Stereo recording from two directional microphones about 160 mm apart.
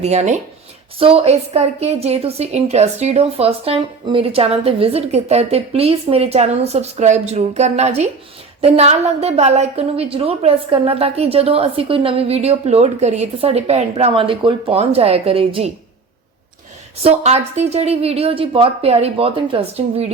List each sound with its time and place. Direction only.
0.0 s a woman's voice: 45° right (ahead or behind)
17.0 s a woman's voice: 40° right (ahead or behind)